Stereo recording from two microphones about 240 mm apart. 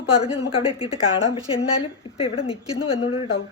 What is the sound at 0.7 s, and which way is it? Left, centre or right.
Speech, left.